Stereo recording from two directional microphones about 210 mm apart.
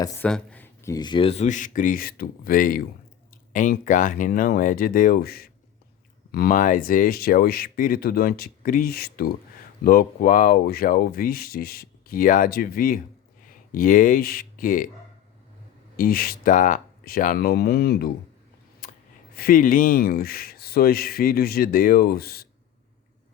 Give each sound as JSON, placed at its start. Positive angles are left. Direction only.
{"t": 0.3, "sound": "speech", "side_deg": 5}
{"t": 16.0, "sound": "speech", "side_deg": 45}
{"t": 18.8, "sound": "a sound", "side_deg": 40}
{"t": 19.4, "sound": "speech", "side_deg": 45}